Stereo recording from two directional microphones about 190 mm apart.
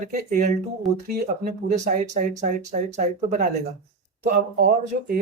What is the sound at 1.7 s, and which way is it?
Speech, 40° right (ahead or behind).